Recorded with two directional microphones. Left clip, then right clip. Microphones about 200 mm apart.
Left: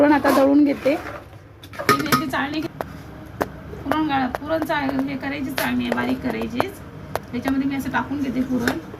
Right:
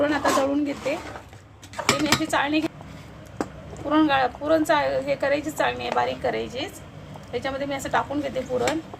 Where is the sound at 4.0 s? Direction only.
60° right (ahead or behind).